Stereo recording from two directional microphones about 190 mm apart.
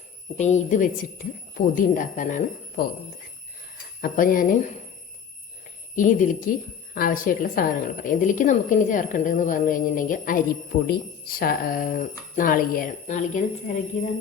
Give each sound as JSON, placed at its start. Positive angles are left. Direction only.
{"t": 0.3, "sound": "a woman's voice", "side_deg": 35}
{"t": 4.0, "sound": "a woman's voice", "side_deg": 45}
{"t": 6.0, "sound": "a woman's voice", "side_deg": 40}